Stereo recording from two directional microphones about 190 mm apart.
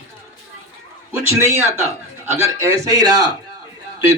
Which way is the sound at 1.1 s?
10° right (ahead or behind).